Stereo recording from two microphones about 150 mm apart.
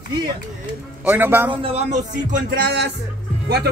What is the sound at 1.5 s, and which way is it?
Speech, 40° right (ahead or behind).